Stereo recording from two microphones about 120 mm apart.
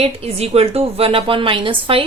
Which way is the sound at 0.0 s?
55° right (ahead or behind).